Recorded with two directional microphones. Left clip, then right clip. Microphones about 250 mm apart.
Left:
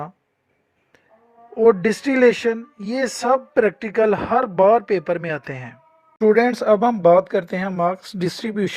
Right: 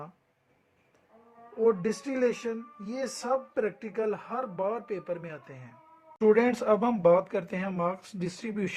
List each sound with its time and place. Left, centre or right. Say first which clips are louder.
1.6 s speech: left 11 dB; left
6.1 s speech: left 7 dB; left